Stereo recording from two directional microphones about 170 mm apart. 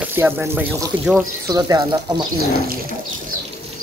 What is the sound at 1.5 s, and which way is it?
Speech, 25° right (ahead or behind).